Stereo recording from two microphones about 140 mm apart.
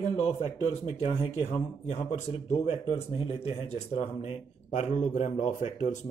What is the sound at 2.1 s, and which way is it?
A man's voice, 45° left (ahead or behind).